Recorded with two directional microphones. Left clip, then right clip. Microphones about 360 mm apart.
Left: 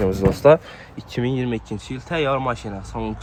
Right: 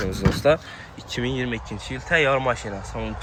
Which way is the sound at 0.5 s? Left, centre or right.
Centre.